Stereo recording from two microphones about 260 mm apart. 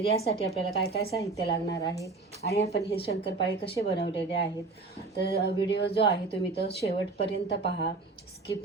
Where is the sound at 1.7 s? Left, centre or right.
Centre.